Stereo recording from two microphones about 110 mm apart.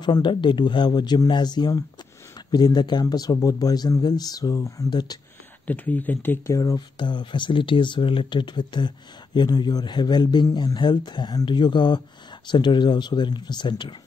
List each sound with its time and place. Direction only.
0.0 s speech: 45° left (ahead or behind)
4.8 s speech: 40° left (ahead or behind)
5.7 s speech: 15° left (ahead or behind)
6.6 s speech: 40° left (ahead or behind)